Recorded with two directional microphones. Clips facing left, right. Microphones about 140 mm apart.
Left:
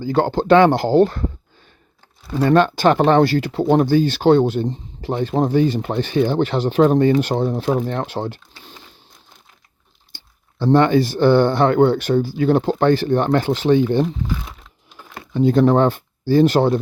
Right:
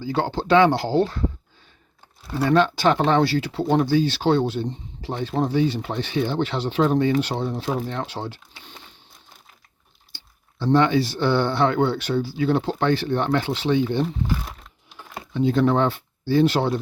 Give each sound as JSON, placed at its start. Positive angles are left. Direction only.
{"t": 0.0, "sound": "speech", "side_deg": 50}
{"t": 2.4, "sound": "speech", "side_deg": 50}
{"t": 10.1, "sound": "a sound", "side_deg": 50}
{"t": 10.6, "sound": "speech", "side_deg": 50}
{"t": 15.3, "sound": "speech", "side_deg": 45}